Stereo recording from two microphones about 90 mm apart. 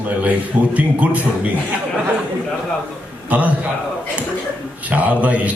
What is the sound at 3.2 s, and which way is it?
Speech, 15° right (ahead or behind).